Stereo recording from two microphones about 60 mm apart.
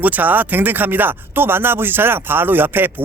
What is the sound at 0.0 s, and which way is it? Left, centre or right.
Speech, right.